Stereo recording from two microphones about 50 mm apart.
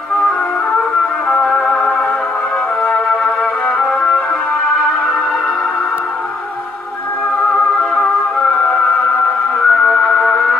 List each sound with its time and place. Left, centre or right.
1.3 s music: centre
7.9 s music: left
9.6 s music: centre